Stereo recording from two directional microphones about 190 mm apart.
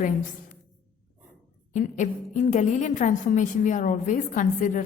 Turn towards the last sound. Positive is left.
turn(degrees=45)  # may be behind; listen again after turning